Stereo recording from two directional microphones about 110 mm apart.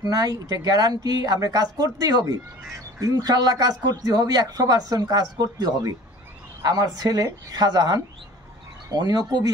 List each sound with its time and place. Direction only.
0.1 s speech: 35° right (ahead or behind)